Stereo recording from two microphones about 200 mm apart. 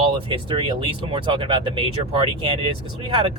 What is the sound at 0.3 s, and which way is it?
Speech, 25° right (ahead or behind).